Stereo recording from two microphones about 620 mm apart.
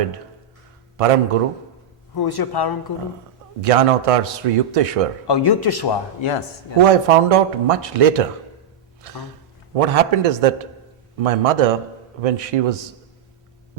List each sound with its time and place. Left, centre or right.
0.9 s a man's voice: right
2.1 s speech: left
3.6 s a man's voice: right
5.3 s speech: left
6.2 s speech: left
6.8 s a man's voice: right